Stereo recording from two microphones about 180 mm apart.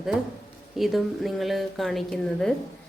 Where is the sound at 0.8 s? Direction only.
Centre (ahead or behind).